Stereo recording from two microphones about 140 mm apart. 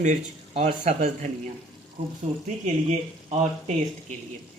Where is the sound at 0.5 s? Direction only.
50° right (ahead or behind).